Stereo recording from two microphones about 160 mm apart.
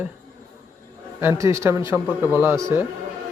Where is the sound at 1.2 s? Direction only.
20° right (ahead or behind).